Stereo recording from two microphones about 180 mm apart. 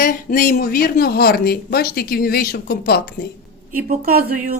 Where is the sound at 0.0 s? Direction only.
50° left (ahead or behind).